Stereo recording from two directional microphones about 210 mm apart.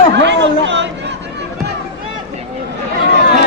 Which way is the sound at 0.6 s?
55° right (ahead or behind).